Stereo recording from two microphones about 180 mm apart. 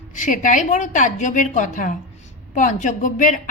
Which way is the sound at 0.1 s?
45° left (ahead or behind).